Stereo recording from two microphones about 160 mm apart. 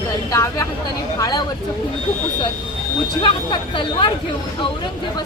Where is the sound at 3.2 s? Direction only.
30° left (ahead or behind).